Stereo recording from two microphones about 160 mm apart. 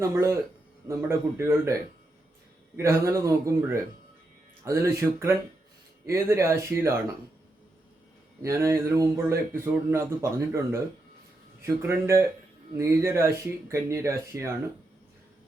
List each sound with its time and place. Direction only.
0.0 s speech: 15° right (ahead or behind)
8.4 s speech: 20° right (ahead or behind)